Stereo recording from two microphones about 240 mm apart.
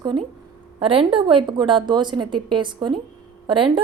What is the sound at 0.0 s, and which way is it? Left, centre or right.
A woman's voice, centre.